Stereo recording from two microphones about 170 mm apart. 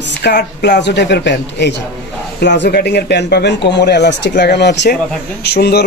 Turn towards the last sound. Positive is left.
turn(degrees=75)  # may be behind; listen again after turning